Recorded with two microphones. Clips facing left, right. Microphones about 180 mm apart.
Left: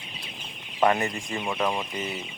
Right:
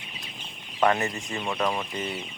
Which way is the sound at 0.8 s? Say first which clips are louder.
Left 1 dB; 25° left (ahead or behind).